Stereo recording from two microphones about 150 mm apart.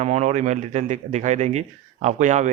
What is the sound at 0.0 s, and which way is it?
A man's voice, 50° right (ahead or behind).